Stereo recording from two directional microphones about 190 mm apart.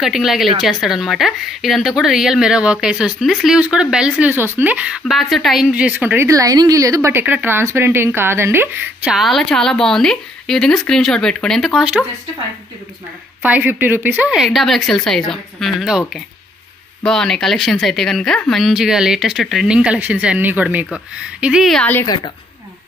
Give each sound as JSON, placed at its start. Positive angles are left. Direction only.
{"t": 0.0, "sound": "speech", "side_deg": 0}
{"t": 13.4, "sound": "speech", "side_deg": -10}
{"t": 17.0, "sound": "speech", "side_deg": 5}
{"t": 22.0, "sound": "a woman's voice", "side_deg": 25}